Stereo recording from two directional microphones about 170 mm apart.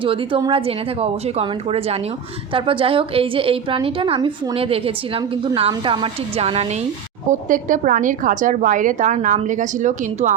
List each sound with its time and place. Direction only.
0.0 s a woman's voice: 30° right (ahead or behind)
7.3 s a woman's voice: 50° right (ahead or behind)